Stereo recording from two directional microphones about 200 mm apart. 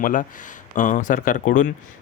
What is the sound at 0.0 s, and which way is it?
Speech, 40° left (ahead or behind).